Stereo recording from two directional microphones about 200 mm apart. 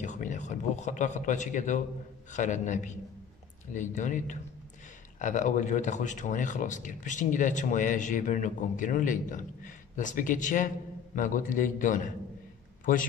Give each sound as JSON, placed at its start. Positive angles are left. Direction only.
{"t": 0.0, "sound": "speech", "side_deg": 40}